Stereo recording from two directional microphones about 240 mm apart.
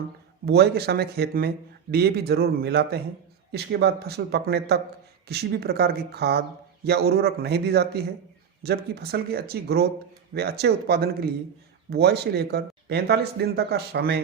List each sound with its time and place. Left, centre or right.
0.4 s speech: right